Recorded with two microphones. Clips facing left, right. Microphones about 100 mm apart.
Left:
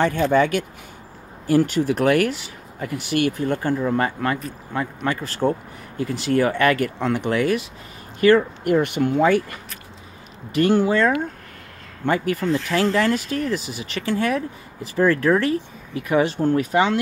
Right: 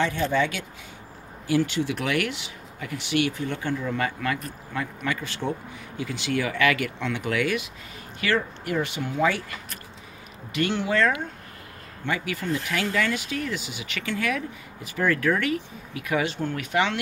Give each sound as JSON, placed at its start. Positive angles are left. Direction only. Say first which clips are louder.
{"t": 0.0, "sound": "speech", "louder": "left 6 dB", "side_deg": 45}
{"t": 8.2, "sound": "speech", "louder": "left 10 dB", "side_deg": 45}
{"t": 10.5, "sound": "speech", "louder": "left 7 dB", "side_deg": 40}
{"t": 12.4, "sound": "speech", "louder": "left 6 dB", "side_deg": 0}
{"t": 12.9, "sound": "speech", "louder": "left 6 dB", "side_deg": 40}